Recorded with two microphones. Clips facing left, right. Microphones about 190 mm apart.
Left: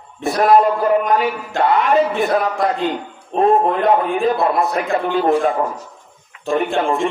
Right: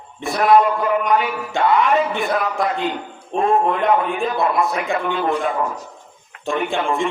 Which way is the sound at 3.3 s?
35° left (ahead or behind).